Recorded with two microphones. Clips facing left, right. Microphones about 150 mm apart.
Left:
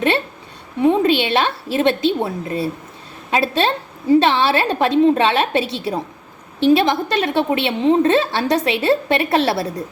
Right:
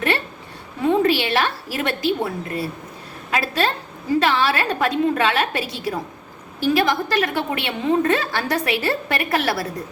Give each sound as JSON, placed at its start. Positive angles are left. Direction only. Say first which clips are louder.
{"t": 0.8, "sound": "a woman's voice", "louder": "left 3 dB", "side_deg": 20}